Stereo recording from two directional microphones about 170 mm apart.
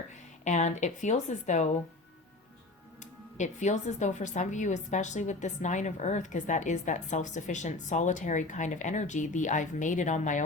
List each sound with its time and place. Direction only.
0.4 s speech: 45° left (ahead or behind)
3.0 s speech: 45° left (ahead or behind)